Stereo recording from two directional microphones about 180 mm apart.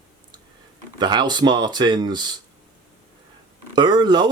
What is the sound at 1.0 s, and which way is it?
Speech, 25° right (ahead or behind).